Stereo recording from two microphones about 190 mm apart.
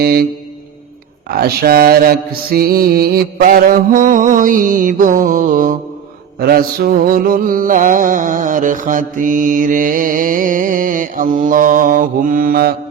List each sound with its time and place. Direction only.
0.0 s music: 55° right (ahead or behind)
1.3 s mantra: 55° right (ahead or behind)